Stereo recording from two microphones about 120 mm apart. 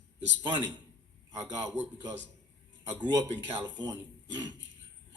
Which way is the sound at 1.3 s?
30° right (ahead or behind).